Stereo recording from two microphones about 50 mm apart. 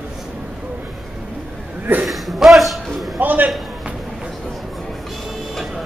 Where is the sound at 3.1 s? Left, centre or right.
Right.